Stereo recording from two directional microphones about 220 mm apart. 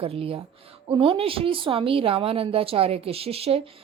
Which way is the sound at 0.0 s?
25° right (ahead or behind).